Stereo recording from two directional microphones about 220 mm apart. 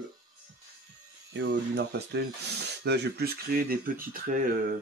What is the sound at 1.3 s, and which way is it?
Speech, 50° right (ahead or behind).